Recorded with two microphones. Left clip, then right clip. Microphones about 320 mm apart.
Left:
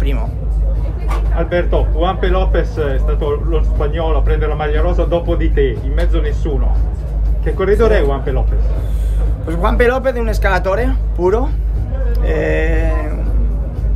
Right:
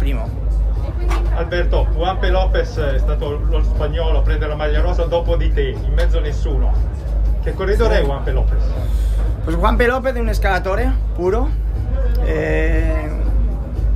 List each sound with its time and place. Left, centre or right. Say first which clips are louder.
1.3 s speech: left 5 dB; centre
9.5 s speech: left 2 dB; centre